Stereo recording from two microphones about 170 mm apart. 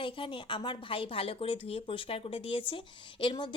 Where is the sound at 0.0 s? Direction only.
30° left (ahead or behind).